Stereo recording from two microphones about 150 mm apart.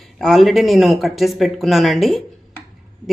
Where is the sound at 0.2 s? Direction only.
Centre (ahead or behind).